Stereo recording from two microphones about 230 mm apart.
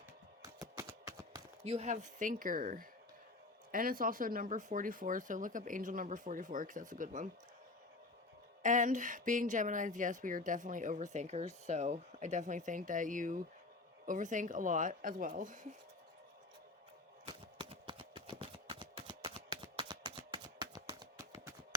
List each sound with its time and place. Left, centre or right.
0.4 s music: centre
1.6 s speech: right
8.6 s speech: right
17.2 s a sound: right